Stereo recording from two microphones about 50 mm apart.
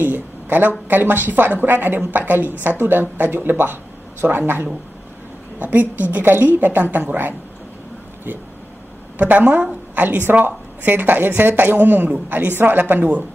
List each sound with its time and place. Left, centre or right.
0.0 s a woman's voice: right
5.6 s a woman's voice: right
9.2 s a woman's voice: right
9.9 s a woman's voice: right